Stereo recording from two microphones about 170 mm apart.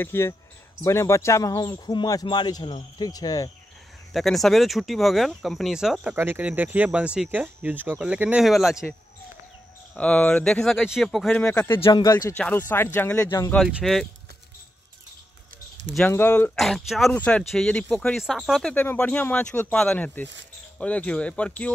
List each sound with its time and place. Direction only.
0.0 s speech: 15° left (ahead or behind)
4.1 s speech: centre (ahead or behind)
9.9 s speech: 5° left (ahead or behind)
11.8 s speech: 25° left (ahead or behind)
12.4 s speech: 10° left (ahead or behind)
13.7 s speech: 5° right (ahead or behind)
16.1 s speech: 10° left (ahead or behind)
16.5 s speech: centre (ahead or behind)